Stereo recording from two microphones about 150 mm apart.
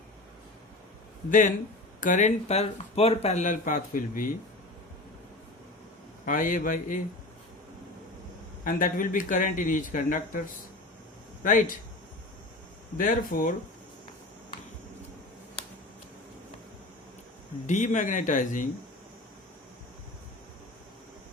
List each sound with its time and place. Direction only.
1.3 s speech: 60° left (ahead or behind)
6.2 s speech: 60° left (ahead or behind)
8.6 s speech: 65° left (ahead or behind)
11.4 s speech: 60° left (ahead or behind)
13.0 s speech: 65° left (ahead or behind)
17.7 s speech: 55° left (ahead or behind)